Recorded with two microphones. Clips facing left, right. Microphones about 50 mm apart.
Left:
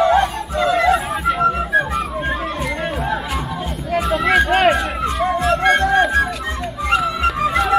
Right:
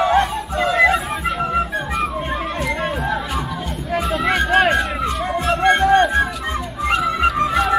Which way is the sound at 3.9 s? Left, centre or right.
Centre.